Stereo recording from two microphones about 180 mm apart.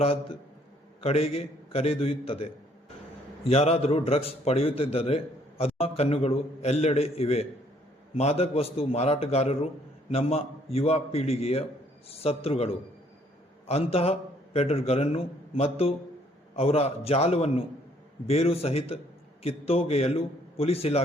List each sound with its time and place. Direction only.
0.0 s a man's voice: 35° left (ahead or behind)
3.5 s a man's voice: 35° left (ahead or behind)